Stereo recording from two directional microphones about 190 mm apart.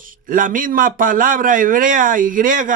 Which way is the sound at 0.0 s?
45° right (ahead or behind).